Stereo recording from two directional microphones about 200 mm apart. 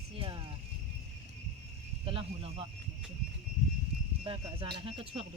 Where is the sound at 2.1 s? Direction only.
25° right (ahead or behind).